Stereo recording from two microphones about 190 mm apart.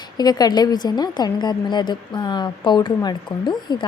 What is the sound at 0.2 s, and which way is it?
A woman's voice, 20° left (ahead or behind).